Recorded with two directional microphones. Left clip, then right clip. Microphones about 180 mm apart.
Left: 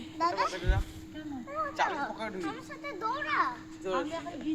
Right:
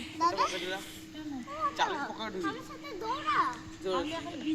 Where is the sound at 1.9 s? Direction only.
Centre (ahead or behind).